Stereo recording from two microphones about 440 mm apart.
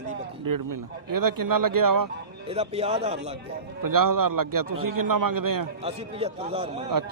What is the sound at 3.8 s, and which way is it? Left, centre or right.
Speech, right.